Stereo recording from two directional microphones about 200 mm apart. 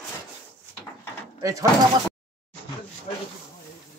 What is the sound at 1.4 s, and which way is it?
Speech, 15° right (ahead or behind).